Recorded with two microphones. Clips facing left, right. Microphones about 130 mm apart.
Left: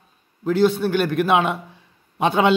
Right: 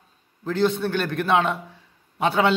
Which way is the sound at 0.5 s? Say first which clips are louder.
Left 4 dB; 10° left (ahead or behind).